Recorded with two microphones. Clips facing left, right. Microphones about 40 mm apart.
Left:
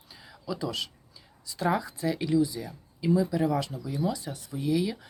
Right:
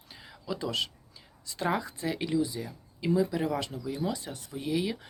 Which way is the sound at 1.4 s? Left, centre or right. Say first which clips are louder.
Left 2 dB; right.